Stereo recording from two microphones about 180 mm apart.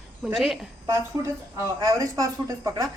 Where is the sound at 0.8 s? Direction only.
15° right (ahead or behind).